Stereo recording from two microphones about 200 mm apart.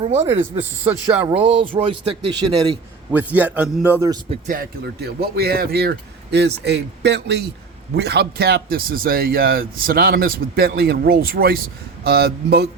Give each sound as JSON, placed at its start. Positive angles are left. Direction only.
{"t": 0.0, "sound": "speech", "side_deg": -30}
{"t": 0.6, "sound": "a man's voice", "side_deg": -10}
{"t": 1.3, "sound": "speech", "side_deg": -30}
{"t": 3.1, "sound": "a man's voice", "side_deg": -10}
{"t": 4.4, "sound": "a man's voice", "side_deg": -45}